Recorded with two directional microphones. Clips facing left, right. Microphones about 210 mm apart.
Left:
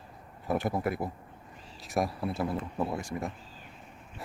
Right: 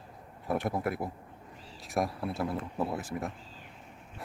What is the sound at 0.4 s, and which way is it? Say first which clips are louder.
Speech: left 1 dB; centre (ahead or behind).